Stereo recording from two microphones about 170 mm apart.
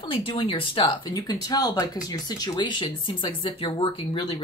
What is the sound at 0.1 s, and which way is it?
Speech, 30° left (ahead or behind).